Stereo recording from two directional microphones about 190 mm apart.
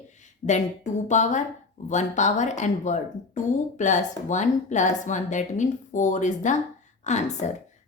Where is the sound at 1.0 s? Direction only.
40° left (ahead or behind).